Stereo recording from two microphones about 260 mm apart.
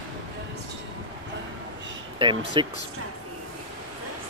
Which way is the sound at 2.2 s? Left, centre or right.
Centre.